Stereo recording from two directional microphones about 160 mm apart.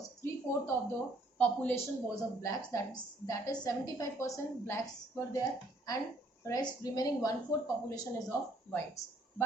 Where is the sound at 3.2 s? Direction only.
20° left (ahead or behind).